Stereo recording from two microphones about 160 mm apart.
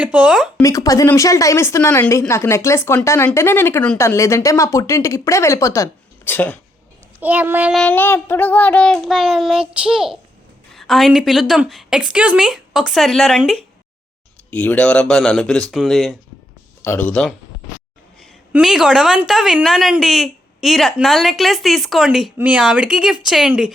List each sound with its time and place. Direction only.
0.0 s speech: 10° right (ahead or behind)
0.6 s speech: 20° left (ahead or behind)
7.2 s speech: 10° right (ahead or behind)
7.8 s a woman's voice: 10° left (ahead or behind)
16.8 s speech: 10° left (ahead or behind)
18.5 s a woman's voice: 5° right (ahead or behind)